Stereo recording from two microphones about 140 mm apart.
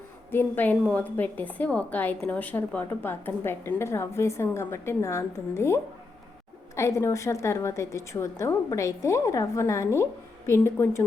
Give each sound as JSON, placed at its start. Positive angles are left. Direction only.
{"t": 0.3, "sound": "a woman's voice", "side_deg": 15}